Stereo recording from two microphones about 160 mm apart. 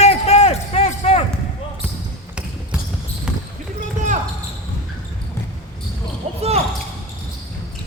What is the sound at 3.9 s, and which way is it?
Basketball bounce, 50° right (ahead or behind).